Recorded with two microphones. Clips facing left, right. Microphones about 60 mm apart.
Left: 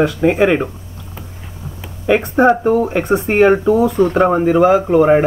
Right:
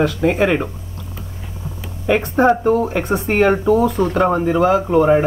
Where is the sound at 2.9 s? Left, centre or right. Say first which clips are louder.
Left 4 dB; centre.